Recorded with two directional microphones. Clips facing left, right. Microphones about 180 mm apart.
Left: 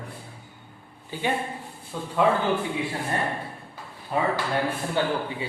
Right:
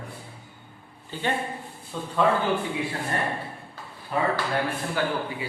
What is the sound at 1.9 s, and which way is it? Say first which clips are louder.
Speech: even; 10° left (ahead or behind).